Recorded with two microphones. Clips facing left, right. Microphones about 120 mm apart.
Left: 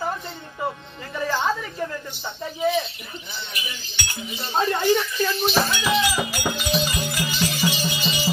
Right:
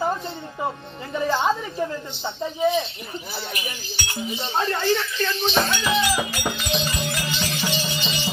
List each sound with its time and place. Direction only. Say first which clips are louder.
1.1 s a woman's voice: right 2 dB; 15° right (ahead or behind)
3.3 s speech: right 2 dB; 40° right (ahead or behind)
4.1 s speech: right 5 dB; 30° right (ahead or behind)
4.5 s speech: left 3 dB; 10° left (ahead or behind)